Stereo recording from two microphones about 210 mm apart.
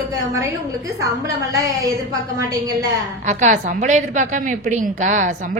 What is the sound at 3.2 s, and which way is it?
A woman's voice, 35° right (ahead or behind).